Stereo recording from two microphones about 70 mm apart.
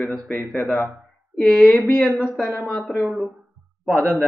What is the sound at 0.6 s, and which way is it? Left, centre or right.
Speech, left.